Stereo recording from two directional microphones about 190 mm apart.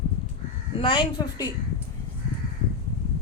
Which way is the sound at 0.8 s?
25° left (ahead or behind).